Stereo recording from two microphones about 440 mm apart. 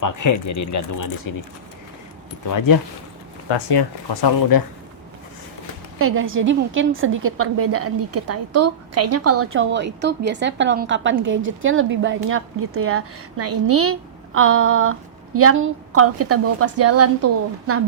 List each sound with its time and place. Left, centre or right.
0.0 s speech: left
2.5 s speech: left
3.5 s speech: left
6.0 s a woman's voice: right